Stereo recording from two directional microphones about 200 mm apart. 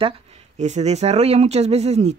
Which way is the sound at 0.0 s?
35° right (ahead or behind).